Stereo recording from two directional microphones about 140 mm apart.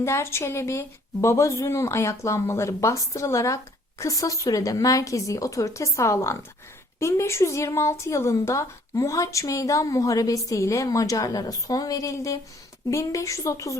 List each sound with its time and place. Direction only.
0.0 s speech: 20° left (ahead or behind)